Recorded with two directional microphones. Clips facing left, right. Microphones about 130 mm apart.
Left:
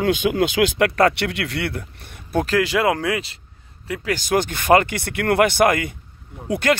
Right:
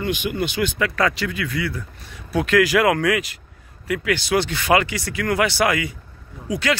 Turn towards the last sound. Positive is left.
turn(degrees=50)  # may be behind; listen again after turning